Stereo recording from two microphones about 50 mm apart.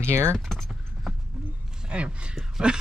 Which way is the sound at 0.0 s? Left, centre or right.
Right.